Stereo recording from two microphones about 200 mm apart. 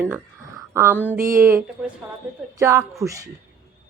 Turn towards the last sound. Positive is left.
turn(degrees=-15)  # may be behind; listen again after turning